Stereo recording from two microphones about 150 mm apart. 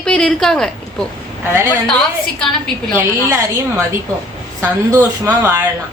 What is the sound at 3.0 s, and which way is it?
Speech, 15° right (ahead or behind).